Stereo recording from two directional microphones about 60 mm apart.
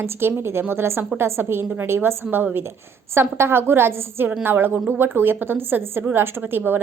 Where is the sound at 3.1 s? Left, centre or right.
Right.